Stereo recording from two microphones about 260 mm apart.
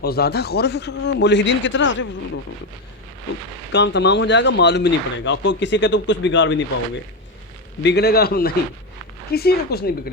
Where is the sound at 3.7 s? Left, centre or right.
Left.